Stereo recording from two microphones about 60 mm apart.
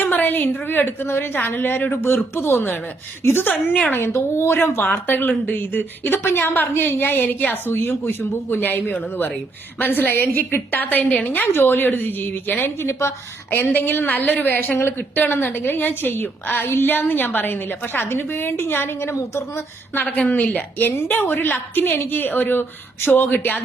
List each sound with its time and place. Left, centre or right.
0.0 s a sound: left
0.7 s a woman's voice: left
3.5 s a woman's voice: left
3.9 s a woman's voice: left
14.8 s speech: left
15.1 s a woman's voice: left
19.1 s speech: left
20.1 s a woman's voice: left